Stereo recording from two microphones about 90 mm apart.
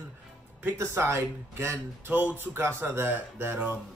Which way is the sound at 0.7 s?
30° right (ahead or behind).